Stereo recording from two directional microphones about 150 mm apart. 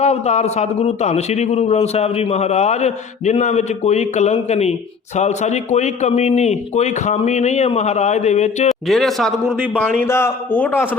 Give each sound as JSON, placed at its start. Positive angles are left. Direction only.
{"t": 0.0, "sound": "a man's voice", "side_deg": 45}
{"t": 8.9, "sound": "a man's voice", "side_deg": 0}
{"t": 10.0, "sound": "a man's voice", "side_deg": 15}